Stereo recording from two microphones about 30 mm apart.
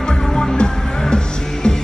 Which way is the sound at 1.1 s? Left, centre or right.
Left.